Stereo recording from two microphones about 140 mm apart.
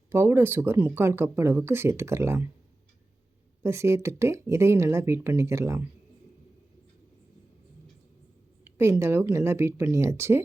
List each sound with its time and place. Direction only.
0.1 s speech: 15° right (ahead or behind)
3.6 s speech: 20° right (ahead or behind)
8.6 s speech: 20° right (ahead or behind)